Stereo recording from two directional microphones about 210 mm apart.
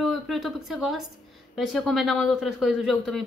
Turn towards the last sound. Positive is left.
turn(degrees=0)  # may be behind; listen again after turning